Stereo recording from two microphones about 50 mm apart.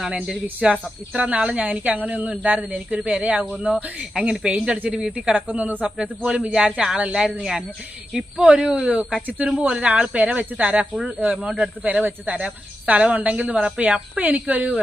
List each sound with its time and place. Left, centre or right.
0.1 s a man's voice: centre
5.5 s speech: right
5.8 s a man's voice: centre
7.0 s a man's voice: right
11.3 s a man's voice: centre
11.8 s speech: right